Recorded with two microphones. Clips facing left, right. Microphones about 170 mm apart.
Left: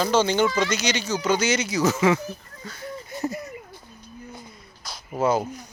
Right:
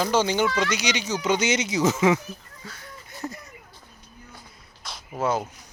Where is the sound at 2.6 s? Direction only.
5° right (ahead or behind).